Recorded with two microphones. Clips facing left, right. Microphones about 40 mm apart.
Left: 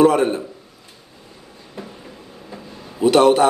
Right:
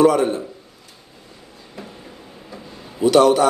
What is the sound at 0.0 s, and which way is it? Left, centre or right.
Speech, left.